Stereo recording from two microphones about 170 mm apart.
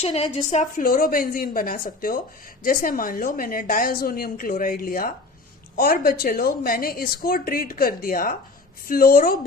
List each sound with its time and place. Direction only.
0.0 s speech: 35° left (ahead or behind); by 9.4 s 60° left (ahead or behind)